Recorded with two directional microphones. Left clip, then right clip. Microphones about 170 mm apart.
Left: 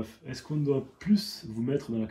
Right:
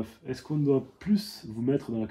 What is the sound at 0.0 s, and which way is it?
Speech, 40° right (ahead or behind).